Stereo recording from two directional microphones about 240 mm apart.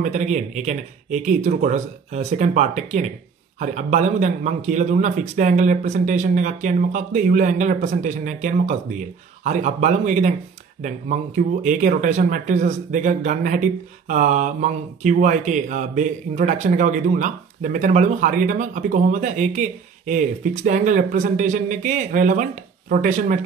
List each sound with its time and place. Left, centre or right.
0.0 s speech: right
11.6 s speech: right